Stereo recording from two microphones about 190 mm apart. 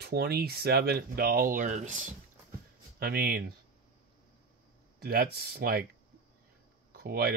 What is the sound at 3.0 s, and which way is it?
Speech, 55° right (ahead or behind).